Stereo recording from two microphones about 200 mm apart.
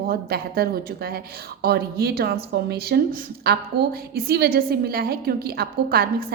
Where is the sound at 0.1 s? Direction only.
50° right (ahead or behind).